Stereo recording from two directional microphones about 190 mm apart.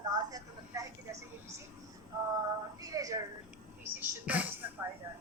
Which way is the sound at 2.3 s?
20° right (ahead or behind).